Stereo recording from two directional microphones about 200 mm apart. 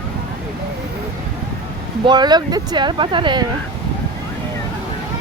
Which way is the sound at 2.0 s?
20° right (ahead or behind).